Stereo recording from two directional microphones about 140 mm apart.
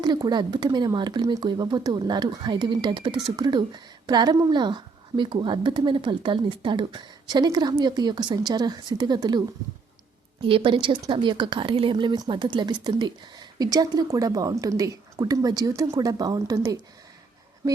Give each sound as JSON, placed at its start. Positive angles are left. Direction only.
{"t": 0.0, "sound": "a woman's voice", "side_deg": -30}
{"t": 10.4, "sound": "a woman's voice", "side_deg": -40}